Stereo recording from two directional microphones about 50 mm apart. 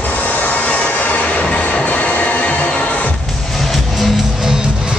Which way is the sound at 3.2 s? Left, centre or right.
Centre.